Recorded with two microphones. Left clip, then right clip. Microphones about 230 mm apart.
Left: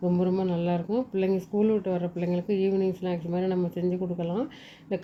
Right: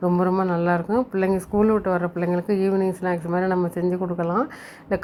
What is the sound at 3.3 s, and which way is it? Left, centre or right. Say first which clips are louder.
Speech: right 6 dB; right.